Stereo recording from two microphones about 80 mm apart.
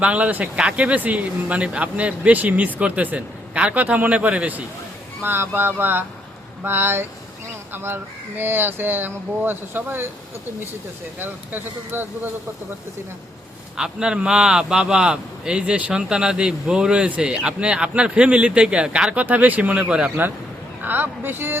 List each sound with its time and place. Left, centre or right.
0.0 s speech: centre
11.2 s speech: right
13.7 s speech: centre
20.8 s speech: right